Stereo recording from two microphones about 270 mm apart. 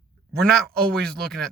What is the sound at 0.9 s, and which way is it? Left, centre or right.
Speech, centre.